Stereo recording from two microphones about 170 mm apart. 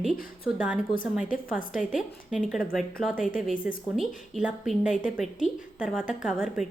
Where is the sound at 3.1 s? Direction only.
50° left (ahead or behind).